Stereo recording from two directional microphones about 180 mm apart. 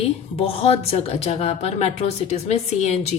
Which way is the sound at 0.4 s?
35° left (ahead or behind).